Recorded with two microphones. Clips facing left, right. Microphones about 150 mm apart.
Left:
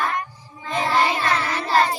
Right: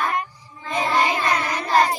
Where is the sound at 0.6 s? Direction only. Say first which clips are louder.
Even; centre (ahead or behind).